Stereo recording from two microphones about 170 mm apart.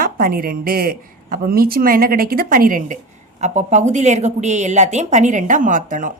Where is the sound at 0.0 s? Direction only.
60° right (ahead or behind).